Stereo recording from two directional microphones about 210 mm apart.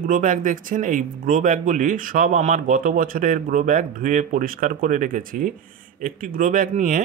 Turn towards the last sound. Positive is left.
turn(degrees=-40)  # may be behind; listen again after turning